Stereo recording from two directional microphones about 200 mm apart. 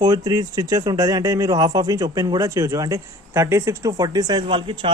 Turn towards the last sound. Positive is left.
turn(degrees=-25)  # may be behind; listen again after turning